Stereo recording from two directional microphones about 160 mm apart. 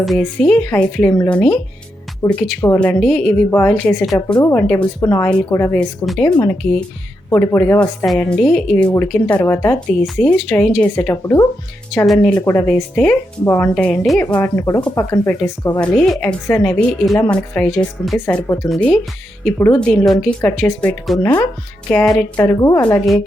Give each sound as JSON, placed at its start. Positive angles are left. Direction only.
{"t": 0.0, "sound": "a woman's voice", "side_deg": 0}
{"t": 2.2, "sound": "a woman's voice", "side_deg": 15}
{"t": 2.8, "sound": "a woman's voice", "side_deg": 5}
{"t": 4.4, "sound": "a woman's voice", "side_deg": 20}
{"t": 4.6, "sound": "a woman's voice", "side_deg": 5}
{"t": 6.1, "sound": "a woman's voice", "side_deg": 5}
{"t": 7.3, "sound": "a woman's voice", "side_deg": 15}
{"t": 12.0, "sound": "a woman's voice", "side_deg": 0}
{"t": 15.1, "sound": "a woman's voice", "side_deg": 20}
{"t": 15.8, "sound": "a woman's voice", "side_deg": 0}